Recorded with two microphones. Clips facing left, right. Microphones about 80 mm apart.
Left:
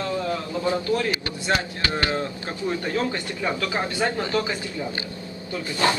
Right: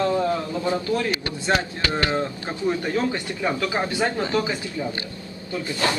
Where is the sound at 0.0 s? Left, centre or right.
Right.